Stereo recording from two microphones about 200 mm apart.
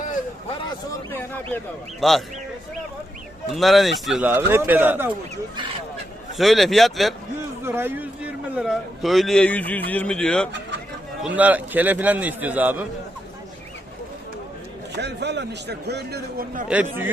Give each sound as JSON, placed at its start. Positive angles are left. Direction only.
{"t": 1.1, "sound": "a man's voice", "side_deg": 10}
{"t": 3.5, "sound": "speech", "side_deg": 0}
{"t": 6.3, "sound": "a man's voice", "side_deg": 0}
{"t": 7.6, "sound": "a man's voice", "side_deg": -10}
{"t": 11.2, "sound": "speech", "side_deg": -5}
{"t": 14.9, "sound": "a man's voice", "side_deg": -60}